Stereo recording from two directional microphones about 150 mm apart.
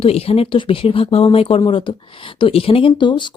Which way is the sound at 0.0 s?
40° left (ahead or behind).